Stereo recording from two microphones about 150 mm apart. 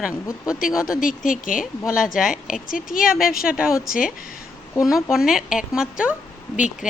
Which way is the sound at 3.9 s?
70° left (ahead or behind).